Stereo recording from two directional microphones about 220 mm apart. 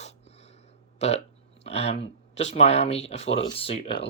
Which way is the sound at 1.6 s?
30° left (ahead or behind).